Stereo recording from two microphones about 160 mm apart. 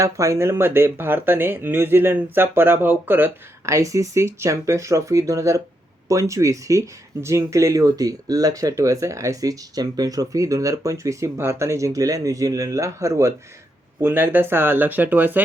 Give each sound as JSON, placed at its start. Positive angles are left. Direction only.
{"t": 0.0, "sound": "speech", "side_deg": -20}